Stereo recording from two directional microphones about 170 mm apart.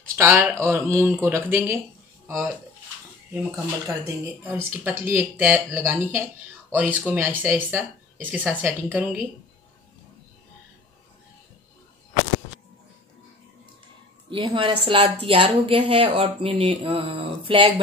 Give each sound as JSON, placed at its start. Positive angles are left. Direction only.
{"t": 0.1, "sound": "speech", "side_deg": -15}
{"t": 14.3, "sound": "a woman's voice", "side_deg": -30}